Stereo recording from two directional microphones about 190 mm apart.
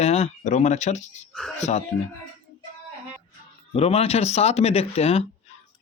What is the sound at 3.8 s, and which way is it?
Speech, 30° left (ahead or behind).